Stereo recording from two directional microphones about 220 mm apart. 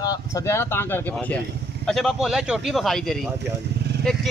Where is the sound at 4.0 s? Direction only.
Centre (ahead or behind).